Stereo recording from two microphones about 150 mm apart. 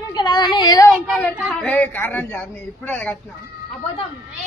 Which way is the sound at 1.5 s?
5° left (ahead or behind).